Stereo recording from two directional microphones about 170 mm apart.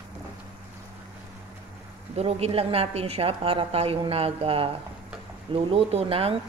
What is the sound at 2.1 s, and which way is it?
A woman's voice, 35° right (ahead or behind).